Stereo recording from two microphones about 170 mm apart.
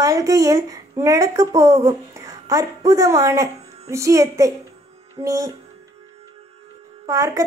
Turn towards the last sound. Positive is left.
turn(degrees=-20)  # may be behind; listen again after turning